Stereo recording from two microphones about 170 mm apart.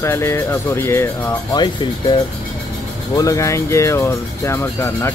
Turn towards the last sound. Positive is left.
turn(degrees=15)  # may be behind; listen again after turning